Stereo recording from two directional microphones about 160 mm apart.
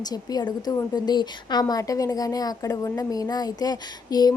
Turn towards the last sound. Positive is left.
turn(degrees=25)  # may be behind; listen again after turning